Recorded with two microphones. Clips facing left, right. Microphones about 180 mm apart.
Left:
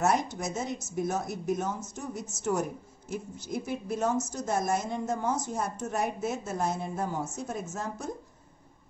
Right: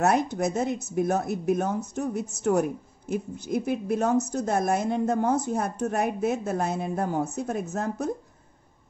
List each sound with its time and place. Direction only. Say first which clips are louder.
0.0 s a woman's voice: right 5 dB; 60° right (ahead or behind)